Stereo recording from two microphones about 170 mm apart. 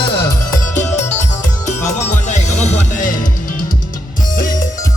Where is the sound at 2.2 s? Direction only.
45° left (ahead or behind).